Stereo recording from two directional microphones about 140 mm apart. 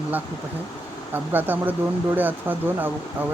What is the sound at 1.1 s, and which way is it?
Speech, 15° right (ahead or behind).